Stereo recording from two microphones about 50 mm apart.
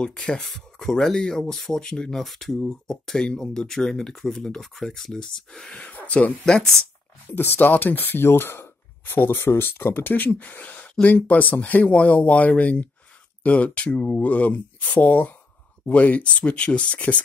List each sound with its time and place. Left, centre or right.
0.0 s speech: centre
5.8 s speech: left
6.4 s speech: centre
7.3 s speech: left